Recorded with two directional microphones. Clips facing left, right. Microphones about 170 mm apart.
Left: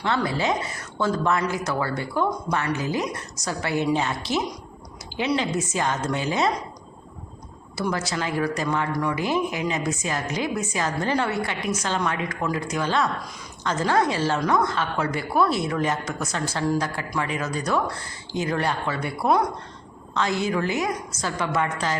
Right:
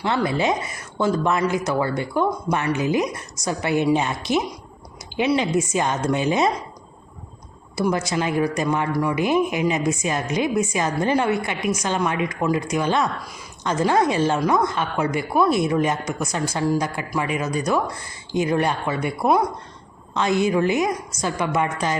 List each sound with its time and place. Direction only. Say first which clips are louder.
0.0 s a woman's voice: right 3 dB; 15° right (ahead or behind)
7.8 s a woman's voice: right 5 dB; 15° right (ahead or behind)